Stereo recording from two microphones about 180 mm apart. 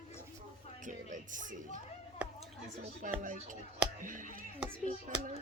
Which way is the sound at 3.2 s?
45° right (ahead or behind).